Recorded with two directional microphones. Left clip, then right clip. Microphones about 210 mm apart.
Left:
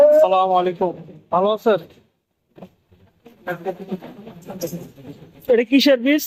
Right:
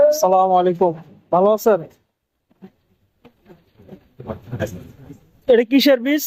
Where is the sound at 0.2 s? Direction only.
20° right (ahead or behind).